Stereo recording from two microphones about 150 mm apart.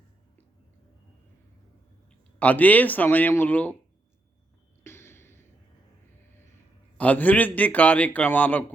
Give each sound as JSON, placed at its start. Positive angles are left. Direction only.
{"t": 2.0, "sound": "speech", "side_deg": 10}
{"t": 4.8, "sound": "a sound", "side_deg": 15}
{"t": 6.9, "sound": "a man's voice", "side_deg": 10}